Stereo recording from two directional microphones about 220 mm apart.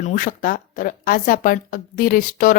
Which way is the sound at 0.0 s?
40° left (ahead or behind).